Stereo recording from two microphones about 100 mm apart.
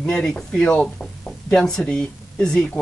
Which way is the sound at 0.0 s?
5° left (ahead or behind).